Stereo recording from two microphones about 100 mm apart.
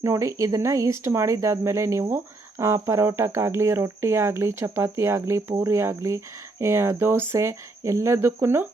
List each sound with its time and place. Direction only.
0.0 s speech: 30° right (ahead or behind)